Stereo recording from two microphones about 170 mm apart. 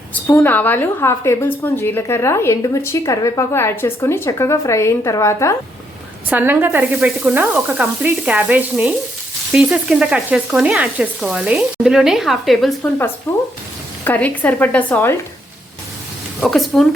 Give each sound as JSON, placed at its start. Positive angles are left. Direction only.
{"t": 0.1, "sound": "a woman's voice", "side_deg": 10}
{"t": 6.3, "sound": "sizzle", "side_deg": -10}
{"t": 9.5, "sound": "frying", "side_deg": -5}
{"t": 13.3, "sound": "a woman's voice", "side_deg": 15}
{"t": 16.4, "sound": "frying", "side_deg": 0}